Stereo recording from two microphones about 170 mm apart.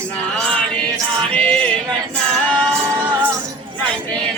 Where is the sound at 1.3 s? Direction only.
5° left (ahead or behind).